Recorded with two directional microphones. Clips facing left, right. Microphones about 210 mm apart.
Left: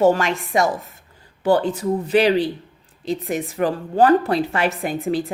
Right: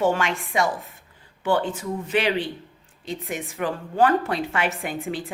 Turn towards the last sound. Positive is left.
turn(degrees=40)  # may be behind; listen again after turning